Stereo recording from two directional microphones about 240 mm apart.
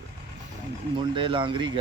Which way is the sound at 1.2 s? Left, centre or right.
Right.